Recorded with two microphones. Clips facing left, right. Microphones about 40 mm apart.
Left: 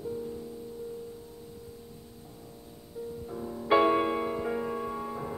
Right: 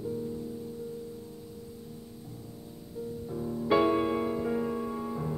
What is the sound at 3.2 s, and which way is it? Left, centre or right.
Music, centre.